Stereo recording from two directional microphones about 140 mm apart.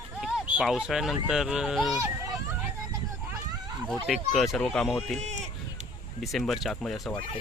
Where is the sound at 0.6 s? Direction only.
5° right (ahead or behind).